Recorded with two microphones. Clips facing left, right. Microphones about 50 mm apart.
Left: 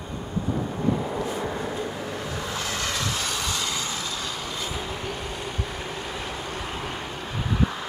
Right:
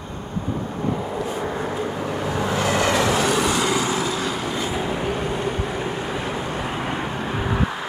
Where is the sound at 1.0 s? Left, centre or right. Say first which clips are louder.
Right 2 dB; centre.